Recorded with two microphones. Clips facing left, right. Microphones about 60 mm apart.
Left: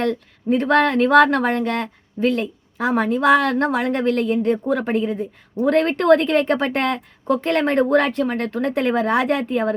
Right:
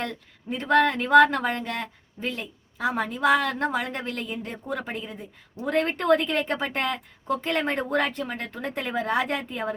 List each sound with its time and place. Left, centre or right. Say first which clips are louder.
0.0 s speech: left 11 dB; left